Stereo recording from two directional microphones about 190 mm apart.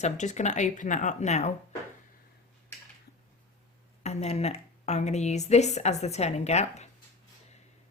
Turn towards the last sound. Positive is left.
turn(degrees=35)  # may be behind; listen again after turning